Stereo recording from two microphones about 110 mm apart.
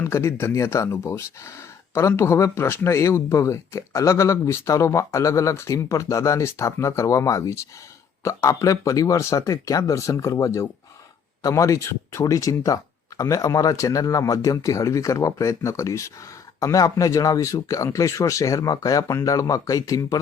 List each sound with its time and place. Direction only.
0.0 s speech: 25° left (ahead or behind)